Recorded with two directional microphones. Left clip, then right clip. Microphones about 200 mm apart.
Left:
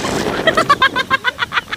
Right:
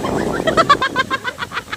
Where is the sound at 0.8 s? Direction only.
50° left (ahead or behind).